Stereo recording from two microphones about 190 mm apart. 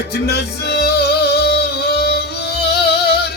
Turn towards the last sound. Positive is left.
turn(degrees=55)  # may be behind; listen again after turning